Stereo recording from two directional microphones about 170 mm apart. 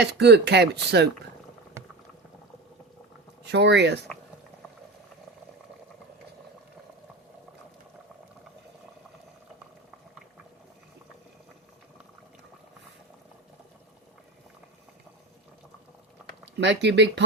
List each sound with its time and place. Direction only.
0.0 s speech: 80° right
3.4 s speech: 90° right
16.6 s speech: 90° right